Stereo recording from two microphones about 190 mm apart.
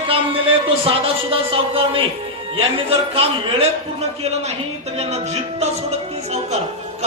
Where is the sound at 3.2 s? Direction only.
35° right (ahead or behind).